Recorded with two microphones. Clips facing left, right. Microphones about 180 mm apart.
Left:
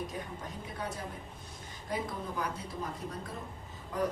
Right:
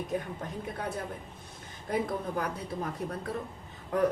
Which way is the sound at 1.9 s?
55° right (ahead or behind).